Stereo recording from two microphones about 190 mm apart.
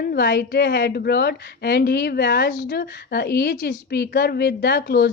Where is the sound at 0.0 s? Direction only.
55° left (ahead or behind).